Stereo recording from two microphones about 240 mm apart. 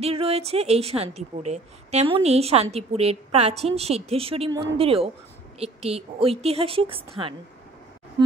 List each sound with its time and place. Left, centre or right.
0.0 s a woman's voice: right